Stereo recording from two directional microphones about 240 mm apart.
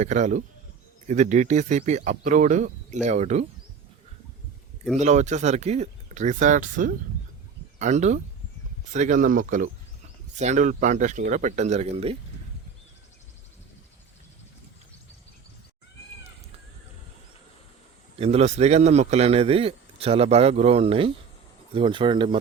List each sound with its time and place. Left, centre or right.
0.0 s speech: right
4.9 s speech: right
18.2 s speech: right